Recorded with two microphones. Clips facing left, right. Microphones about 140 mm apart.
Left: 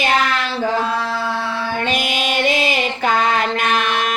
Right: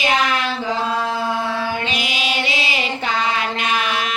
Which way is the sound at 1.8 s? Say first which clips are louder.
Left 4 dB; 50° left (ahead or behind).